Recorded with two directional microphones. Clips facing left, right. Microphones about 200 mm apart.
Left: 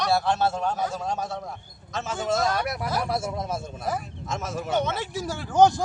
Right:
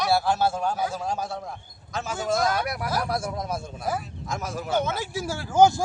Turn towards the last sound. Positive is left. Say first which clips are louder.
# even
turn(degrees=-5)  # may be behind; listen again after turning